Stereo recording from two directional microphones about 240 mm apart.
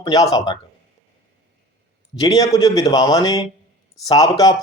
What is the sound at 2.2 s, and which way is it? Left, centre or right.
A man's voice, centre.